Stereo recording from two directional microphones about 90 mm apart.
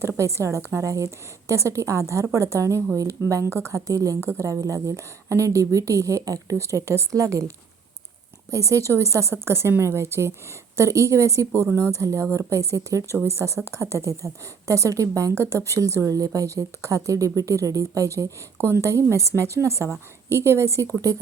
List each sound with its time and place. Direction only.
0.2 s a woman's voice: 35° right (ahead or behind)